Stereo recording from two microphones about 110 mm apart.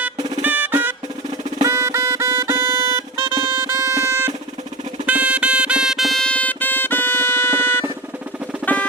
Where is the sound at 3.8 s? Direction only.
25° right (ahead or behind).